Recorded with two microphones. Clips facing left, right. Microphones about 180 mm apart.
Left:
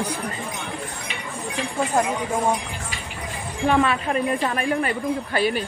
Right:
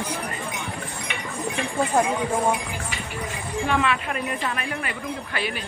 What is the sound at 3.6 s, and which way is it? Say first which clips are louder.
Speech: left 5 dB; 35° left (ahead or behind).